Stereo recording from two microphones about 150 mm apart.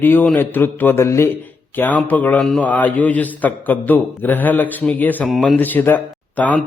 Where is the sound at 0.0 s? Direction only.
15° left (ahead or behind).